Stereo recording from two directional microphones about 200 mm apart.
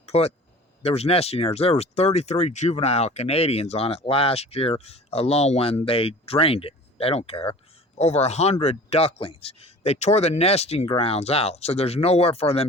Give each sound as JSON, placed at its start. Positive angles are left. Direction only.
{"t": 0.0, "sound": "speech", "side_deg": 30}